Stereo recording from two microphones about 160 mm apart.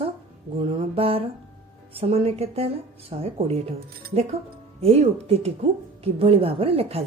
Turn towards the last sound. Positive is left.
turn(degrees=-35)  # may be behind; listen again after turning